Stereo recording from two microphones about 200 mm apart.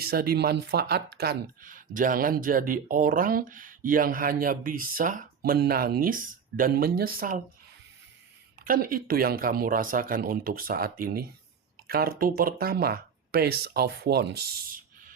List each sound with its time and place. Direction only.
0.0 s speech: 50° right (ahead or behind)
8.6 s speech: 45° right (ahead or behind)